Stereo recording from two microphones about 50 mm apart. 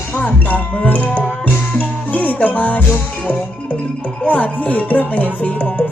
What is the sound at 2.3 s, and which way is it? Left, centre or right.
Speech, left.